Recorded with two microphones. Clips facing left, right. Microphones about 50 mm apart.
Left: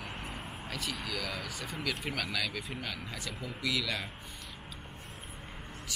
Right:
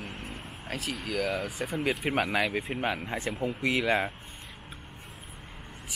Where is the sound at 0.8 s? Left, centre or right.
Centre.